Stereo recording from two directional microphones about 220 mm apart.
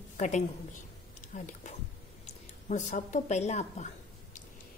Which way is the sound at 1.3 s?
35° left (ahead or behind).